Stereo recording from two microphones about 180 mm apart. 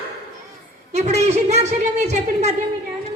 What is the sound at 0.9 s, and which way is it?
Speech, 40° right (ahead or behind).